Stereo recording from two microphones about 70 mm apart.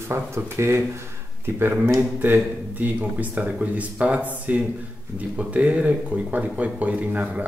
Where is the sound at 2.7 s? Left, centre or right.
Right.